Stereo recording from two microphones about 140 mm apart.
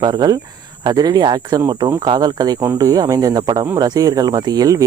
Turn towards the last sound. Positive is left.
turn(degrees=-25)  # may be behind; listen again after turning